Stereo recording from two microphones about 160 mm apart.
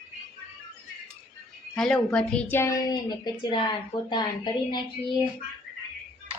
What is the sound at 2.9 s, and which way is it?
A woman's voice, 25° left (ahead or behind).